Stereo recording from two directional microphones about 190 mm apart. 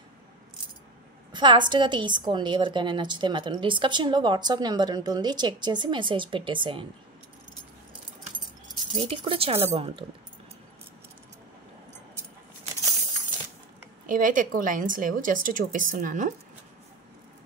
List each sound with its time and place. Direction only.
1.3 s a woman's voice: 25° right (ahead or behind)
8.9 s a woman's voice: 30° right (ahead or behind)
14.0 s a woman's voice: 45° right (ahead or behind)